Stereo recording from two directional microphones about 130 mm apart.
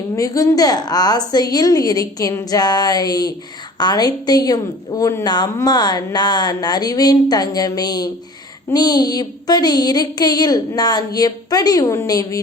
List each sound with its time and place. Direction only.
0.2 s a woman's voice: 25° left (ahead or behind)